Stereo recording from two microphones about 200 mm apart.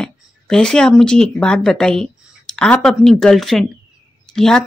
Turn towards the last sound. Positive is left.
turn(degrees=5)  # may be behind; listen again after turning